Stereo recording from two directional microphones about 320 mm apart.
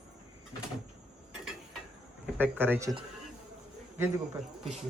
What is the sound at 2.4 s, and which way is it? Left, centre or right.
A man's voice, centre.